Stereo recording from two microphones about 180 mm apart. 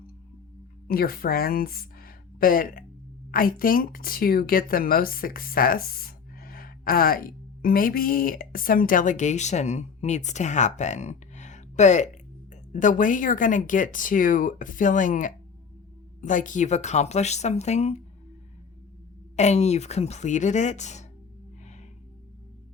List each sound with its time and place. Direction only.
0.9 s a woman's voice: 55° left (ahead or behind); by 17.9 s 40° left (ahead or behind)
19.4 s a woman's voice: 40° left (ahead or behind)
21.6 s music: 40° left (ahead or behind)